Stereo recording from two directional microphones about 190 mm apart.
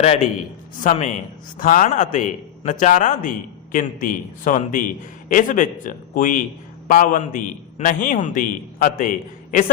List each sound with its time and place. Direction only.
0.0 s a man's voice: 35° left (ahead or behind)